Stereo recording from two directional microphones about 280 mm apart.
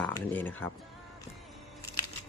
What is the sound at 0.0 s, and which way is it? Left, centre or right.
Speech, centre.